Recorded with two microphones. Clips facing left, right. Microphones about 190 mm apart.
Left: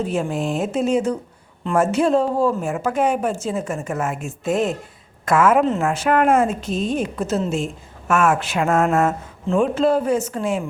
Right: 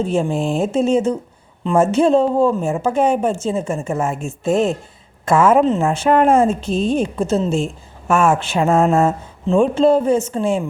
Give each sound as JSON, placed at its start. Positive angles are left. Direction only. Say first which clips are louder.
{"t": 0.0, "sound": "a woman's voice", "louder": "right 4 dB", "side_deg": -30}